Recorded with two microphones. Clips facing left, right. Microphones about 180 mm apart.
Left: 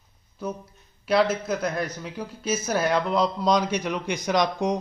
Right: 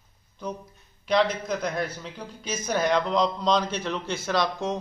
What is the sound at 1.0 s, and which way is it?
A man's voice, 5° left (ahead or behind).